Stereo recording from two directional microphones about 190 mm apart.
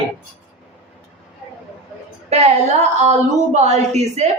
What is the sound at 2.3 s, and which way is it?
A woman's voice, 35° right (ahead or behind).